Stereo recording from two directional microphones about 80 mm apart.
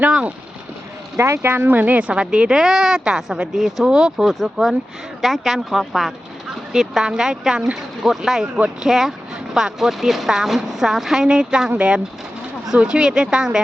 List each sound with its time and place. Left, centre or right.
0.1 s speech: centre
1.1 s speech: right; by 13.6 s centre